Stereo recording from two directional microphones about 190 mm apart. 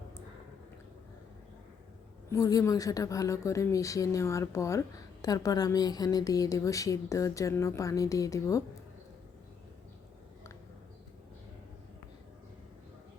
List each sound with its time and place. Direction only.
2.3 s speech: 20° left (ahead or behind)